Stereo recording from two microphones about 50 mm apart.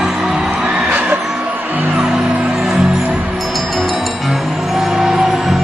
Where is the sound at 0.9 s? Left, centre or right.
Right.